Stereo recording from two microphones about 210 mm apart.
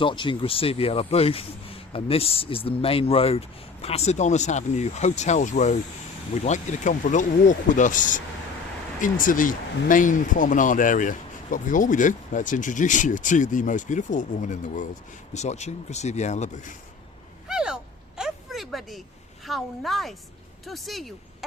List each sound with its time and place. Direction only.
0.0 s a man's voice: 25° left (ahead or behind)
17.5 s a sound: 5° right (ahead or behind)
19.5 s speech: centre (ahead or behind)